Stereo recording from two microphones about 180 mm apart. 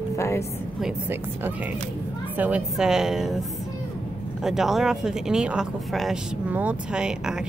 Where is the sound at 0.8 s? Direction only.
10° right (ahead or behind).